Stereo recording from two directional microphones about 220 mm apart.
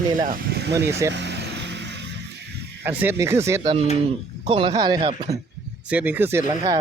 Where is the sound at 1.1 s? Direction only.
50° right (ahead or behind).